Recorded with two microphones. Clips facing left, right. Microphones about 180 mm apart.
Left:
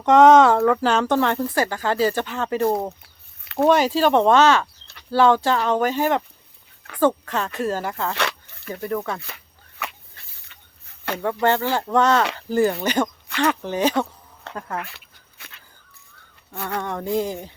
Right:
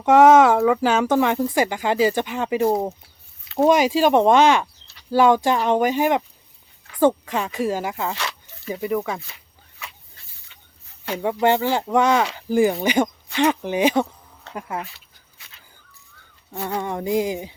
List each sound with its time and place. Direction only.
0.0 s speech: 5° right (ahead or behind)
8.1 s snake: 60° left (ahead or behind)
8.7 s speech: 15° right (ahead or behind)
9.2 s a sound: 60° left (ahead or behind)
11.2 s speech: 15° right (ahead or behind)
14.5 s a sound: 60° left (ahead or behind)
16.5 s speech: 15° right (ahead or behind)